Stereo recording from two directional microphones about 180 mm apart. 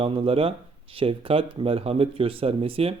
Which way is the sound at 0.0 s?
30° right (ahead or behind).